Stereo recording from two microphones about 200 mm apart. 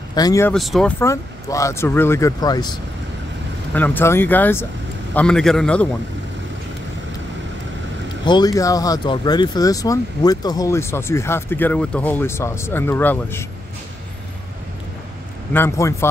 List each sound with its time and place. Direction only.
0.1 s speech: 20° left (ahead or behind)
0.5 s speech: centre (ahead or behind); by 2.8 s 20° left (ahead or behind)
3.7 s a man's voice: 10° left (ahead or behind)
8.3 s speech: 20° left (ahead or behind)
15.5 s speech: 10° left (ahead or behind)